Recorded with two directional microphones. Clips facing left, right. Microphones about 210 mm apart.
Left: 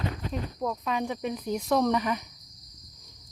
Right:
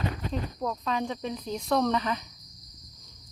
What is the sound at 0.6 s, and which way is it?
Speech, 10° left (ahead or behind).